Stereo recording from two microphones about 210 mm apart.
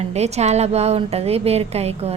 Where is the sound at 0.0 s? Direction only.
30° right (ahead or behind).